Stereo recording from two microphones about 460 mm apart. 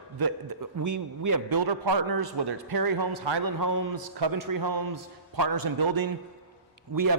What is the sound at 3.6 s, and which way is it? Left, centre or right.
A man's voice, right.